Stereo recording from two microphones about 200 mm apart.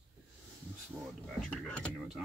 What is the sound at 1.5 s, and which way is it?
Speech, 5° left (ahead or behind).